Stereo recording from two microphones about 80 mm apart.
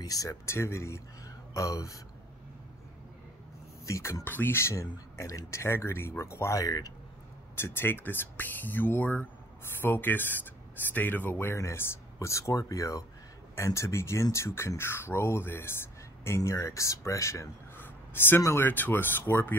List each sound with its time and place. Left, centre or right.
0.0 s speech: left
3.8 s speech: left
4.2 s speech: left
6.6 s speech: left
7.5 s speech: left
17.7 s a sound: left
18.4 s speech: left